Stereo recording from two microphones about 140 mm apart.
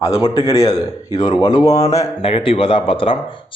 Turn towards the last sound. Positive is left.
turn(degrees=40)  # may be behind; listen again after turning